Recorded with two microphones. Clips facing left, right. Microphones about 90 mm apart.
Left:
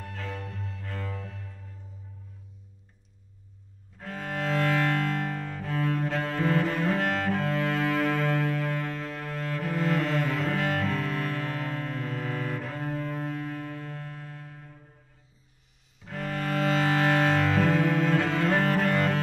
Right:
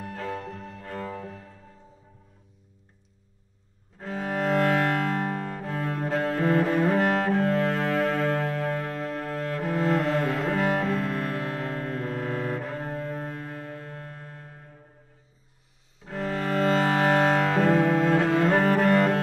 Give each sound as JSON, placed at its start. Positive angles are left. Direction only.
{"t": 0.0, "sound": "music", "side_deg": -10}
{"t": 0.7, "sound": "music", "side_deg": -35}
{"t": 4.1, "sound": "music", "side_deg": -5}
{"t": 5.1, "sound": "music", "side_deg": -30}
{"t": 5.6, "sound": "cello", "side_deg": -30}
{"t": 6.9, "sound": "cello", "side_deg": -10}
{"t": 7.2, "sound": "music", "side_deg": -30}
{"t": 10.4, "sound": "cello", "side_deg": -10}
{"t": 10.9, "sound": "music", "side_deg": -35}
{"t": 16.0, "sound": "cello", "side_deg": 0}
{"t": 17.6, "sound": "music", "side_deg": -35}
{"t": 18.5, "sound": "cello", "side_deg": -5}